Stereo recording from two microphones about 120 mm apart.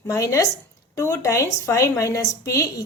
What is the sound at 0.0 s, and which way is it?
A woman's voice, 25° left (ahead or behind).